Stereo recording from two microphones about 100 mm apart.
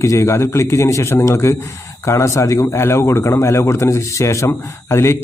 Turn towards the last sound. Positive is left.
turn(degrees=25)  # may be behind; listen again after turning